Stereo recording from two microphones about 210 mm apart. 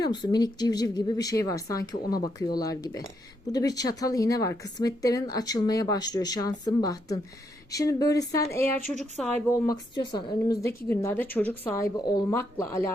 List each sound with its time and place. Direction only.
0.0 s a woman's voice: 20° left (ahead or behind)
9.5 s a woman's voice: 20° left (ahead or behind)